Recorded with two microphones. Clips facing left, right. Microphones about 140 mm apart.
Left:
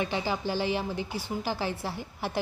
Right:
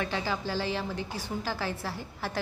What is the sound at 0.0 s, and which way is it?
A woman's voice, 20° left (ahead or behind).